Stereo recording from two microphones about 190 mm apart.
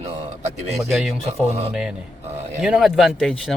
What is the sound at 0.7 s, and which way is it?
Speech, centre (ahead or behind).